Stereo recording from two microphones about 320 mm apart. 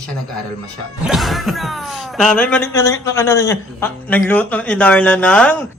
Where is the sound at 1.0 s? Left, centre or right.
Centre.